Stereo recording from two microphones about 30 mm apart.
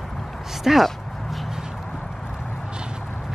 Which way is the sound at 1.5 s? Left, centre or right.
Centre.